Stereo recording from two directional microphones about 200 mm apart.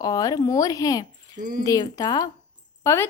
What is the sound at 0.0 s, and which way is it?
A woman's voice, 15° left (ahead or behind).